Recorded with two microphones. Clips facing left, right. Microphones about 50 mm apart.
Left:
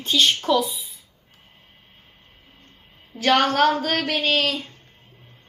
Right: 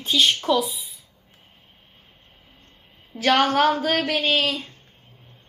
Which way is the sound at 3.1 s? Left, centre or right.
Centre.